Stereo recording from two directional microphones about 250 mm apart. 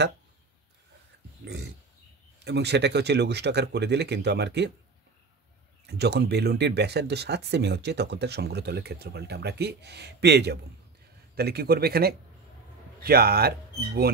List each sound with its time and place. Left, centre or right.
1.4 s speech: right
5.9 s speech: right